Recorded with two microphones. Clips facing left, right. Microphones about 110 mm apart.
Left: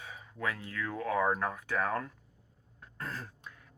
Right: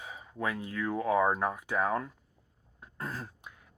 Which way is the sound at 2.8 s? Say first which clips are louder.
Right 2 dB; 20° right (ahead or behind).